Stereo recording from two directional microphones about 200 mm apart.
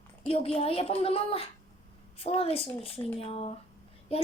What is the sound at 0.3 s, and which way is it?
Speech, 30° left (ahead or behind).